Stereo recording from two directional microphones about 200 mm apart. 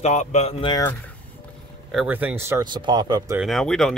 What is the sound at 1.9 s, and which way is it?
Speech, 5° right (ahead or behind).